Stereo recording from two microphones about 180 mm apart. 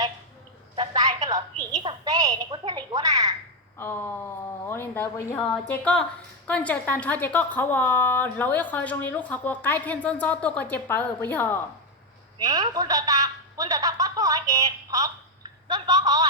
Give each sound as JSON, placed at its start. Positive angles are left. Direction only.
{"t": 0.8, "sound": "telephone", "side_deg": -20}
{"t": 1.3, "sound": "a woman's voice", "side_deg": -20}
{"t": 3.8, "sound": "a woman's voice", "side_deg": 10}
{"t": 12.4, "sound": "a man's voice", "side_deg": -20}